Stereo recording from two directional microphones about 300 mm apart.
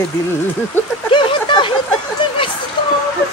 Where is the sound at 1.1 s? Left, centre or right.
Centre.